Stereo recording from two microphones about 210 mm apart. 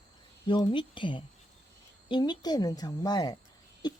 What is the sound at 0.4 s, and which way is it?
Speech, 20° left (ahead or behind).